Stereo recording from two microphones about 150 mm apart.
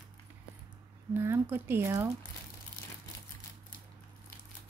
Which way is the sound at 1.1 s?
15° right (ahead or behind).